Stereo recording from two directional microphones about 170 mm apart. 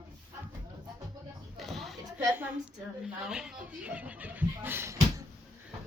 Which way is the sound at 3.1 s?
5° right (ahead or behind).